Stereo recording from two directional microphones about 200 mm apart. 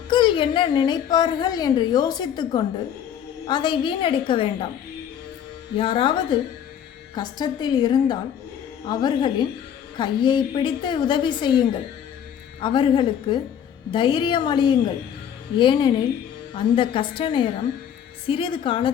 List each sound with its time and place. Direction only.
0.1 s a woman's voice: 25° left (ahead or behind)
5.7 s a woman's voice: 25° left (ahead or behind)